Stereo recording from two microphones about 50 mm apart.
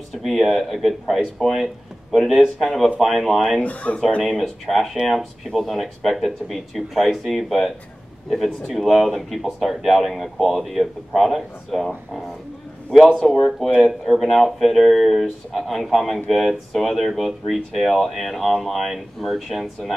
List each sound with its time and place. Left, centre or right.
0.2 s speech: centre
3.6 s speech: left
4.3 s speech: centre
13.2 s speech: centre